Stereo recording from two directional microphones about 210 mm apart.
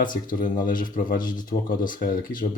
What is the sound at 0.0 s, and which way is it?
Speech, 40° left (ahead or behind).